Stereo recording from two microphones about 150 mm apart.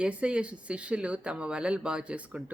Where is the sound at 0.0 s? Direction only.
5° right (ahead or behind).